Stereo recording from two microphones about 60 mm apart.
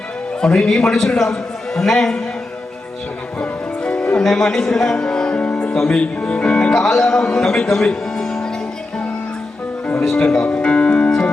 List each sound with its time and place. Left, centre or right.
0.4 s a man's voice: centre
3.4 s music: centre
6.7 s speech: centre
10.2 s music: centre